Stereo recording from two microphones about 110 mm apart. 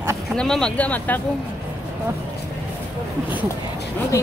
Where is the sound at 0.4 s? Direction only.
5° left (ahead or behind).